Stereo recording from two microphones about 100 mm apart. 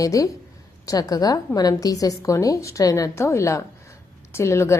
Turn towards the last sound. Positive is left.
turn(degrees=25)  # may be behind; listen again after turning